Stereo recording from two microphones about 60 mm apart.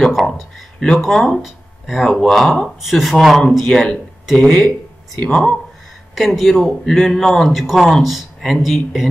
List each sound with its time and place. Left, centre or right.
0.0 s a man's voice: centre
6.1 s a man's voice: centre